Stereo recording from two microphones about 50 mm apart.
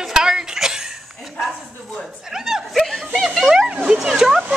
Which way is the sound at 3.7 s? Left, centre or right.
Right.